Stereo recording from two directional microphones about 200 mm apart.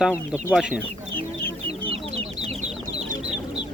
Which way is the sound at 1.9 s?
30° right (ahead or behind).